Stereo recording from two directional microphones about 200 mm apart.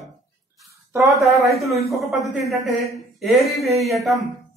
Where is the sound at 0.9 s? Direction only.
Centre (ahead or behind).